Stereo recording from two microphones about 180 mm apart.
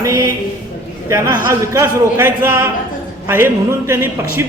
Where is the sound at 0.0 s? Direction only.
15° right (ahead or behind).